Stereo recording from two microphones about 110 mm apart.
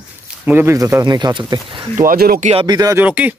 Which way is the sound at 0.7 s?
30° right (ahead or behind).